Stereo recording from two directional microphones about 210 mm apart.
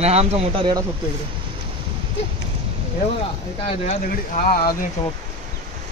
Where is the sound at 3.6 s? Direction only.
35° left (ahead or behind).